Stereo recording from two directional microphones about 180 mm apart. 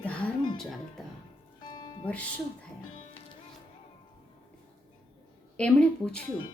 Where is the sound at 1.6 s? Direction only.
25° left (ahead or behind).